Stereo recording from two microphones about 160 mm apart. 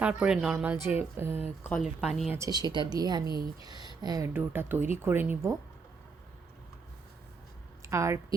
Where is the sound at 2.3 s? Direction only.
20° right (ahead or behind).